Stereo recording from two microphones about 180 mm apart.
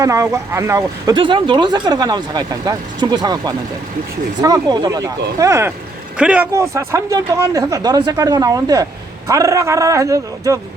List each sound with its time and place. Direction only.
0.0 s speech: 15° right (ahead or behind)